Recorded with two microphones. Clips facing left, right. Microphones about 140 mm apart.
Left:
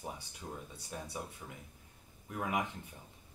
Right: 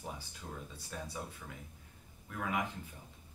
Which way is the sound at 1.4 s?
30° left (ahead or behind).